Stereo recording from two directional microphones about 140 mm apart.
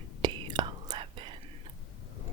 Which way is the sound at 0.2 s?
30° right (ahead or behind).